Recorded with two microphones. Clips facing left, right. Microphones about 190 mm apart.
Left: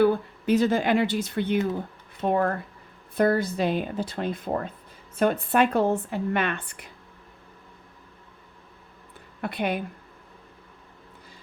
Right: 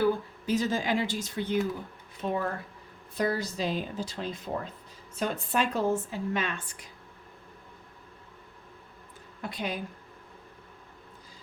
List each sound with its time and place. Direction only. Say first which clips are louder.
0.0 s a woman's voice: left 5 dB; 60° left (ahead or behind)
9.4 s a woman's voice: left 7 dB; 60° left (ahead or behind)